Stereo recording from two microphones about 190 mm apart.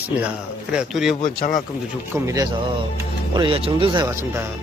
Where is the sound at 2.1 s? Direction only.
20° right (ahead or behind).